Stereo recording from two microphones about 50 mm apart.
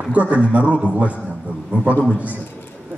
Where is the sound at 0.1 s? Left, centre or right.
Right.